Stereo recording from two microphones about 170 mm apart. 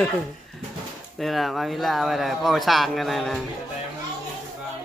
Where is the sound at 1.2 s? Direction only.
Centre (ahead or behind).